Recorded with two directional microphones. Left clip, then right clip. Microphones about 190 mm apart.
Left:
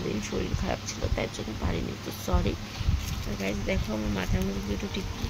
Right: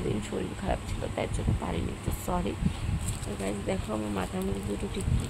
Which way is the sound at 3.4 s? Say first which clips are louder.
Left 2 dB; 10° right (ahead or behind).